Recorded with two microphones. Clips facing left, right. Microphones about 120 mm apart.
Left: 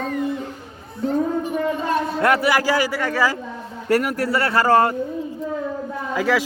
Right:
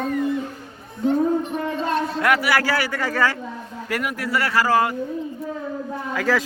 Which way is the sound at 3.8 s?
35° left (ahead or behind).